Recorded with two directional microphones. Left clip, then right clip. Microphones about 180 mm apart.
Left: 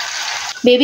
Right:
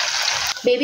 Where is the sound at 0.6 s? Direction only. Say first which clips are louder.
Left 7 dB; 60° left (ahead or behind).